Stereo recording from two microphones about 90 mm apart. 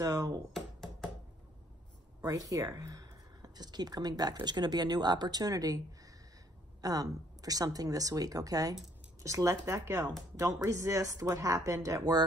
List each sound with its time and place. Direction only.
0.0 s speech: 35° right (ahead or behind)
0.5 s a sound: 5° left (ahead or behind)
2.2 s speech: 40° right (ahead or behind)